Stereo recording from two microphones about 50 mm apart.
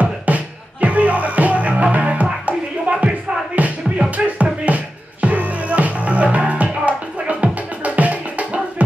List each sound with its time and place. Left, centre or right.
0.0 s music: right